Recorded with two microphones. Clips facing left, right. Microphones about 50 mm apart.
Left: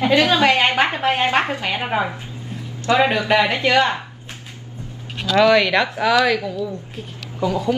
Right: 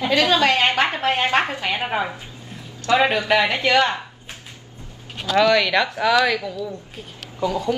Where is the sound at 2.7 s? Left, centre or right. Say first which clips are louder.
Left 1 dB; left.